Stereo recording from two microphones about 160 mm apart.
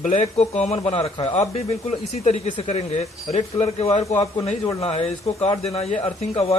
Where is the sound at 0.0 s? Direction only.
45° left (ahead or behind).